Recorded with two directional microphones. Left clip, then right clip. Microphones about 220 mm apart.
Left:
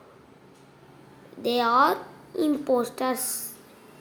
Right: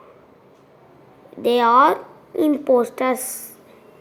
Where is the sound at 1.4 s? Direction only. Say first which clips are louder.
Right 7 dB; 15° right (ahead or behind).